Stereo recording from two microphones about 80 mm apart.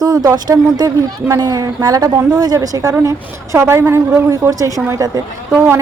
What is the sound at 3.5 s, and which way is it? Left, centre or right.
A woman's voice, right.